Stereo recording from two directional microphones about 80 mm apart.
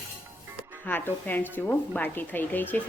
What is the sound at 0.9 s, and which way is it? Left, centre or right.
A woman's voice, left.